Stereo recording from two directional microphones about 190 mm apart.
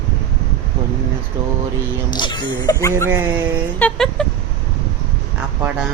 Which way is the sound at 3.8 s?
5° left (ahead or behind).